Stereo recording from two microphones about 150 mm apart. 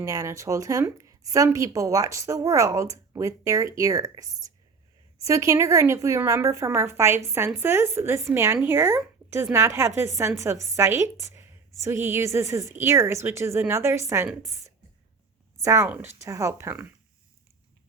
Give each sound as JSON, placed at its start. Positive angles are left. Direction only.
{"t": 0.0, "sound": "a woman's voice", "side_deg": -20}
{"t": 15.6, "sound": "a woman's voice", "side_deg": -20}